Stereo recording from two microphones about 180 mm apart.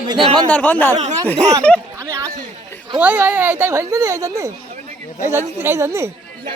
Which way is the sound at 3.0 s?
10° right (ahead or behind).